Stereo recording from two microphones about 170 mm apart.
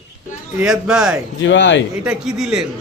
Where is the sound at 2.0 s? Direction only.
5° right (ahead or behind).